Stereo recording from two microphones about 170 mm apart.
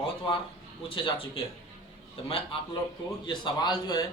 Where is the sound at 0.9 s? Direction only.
30° left (ahead or behind).